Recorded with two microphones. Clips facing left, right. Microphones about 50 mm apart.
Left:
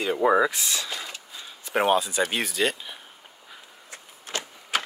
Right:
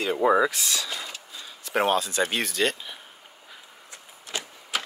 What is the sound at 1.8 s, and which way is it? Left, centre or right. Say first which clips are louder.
Speech: left 1 dB; centre.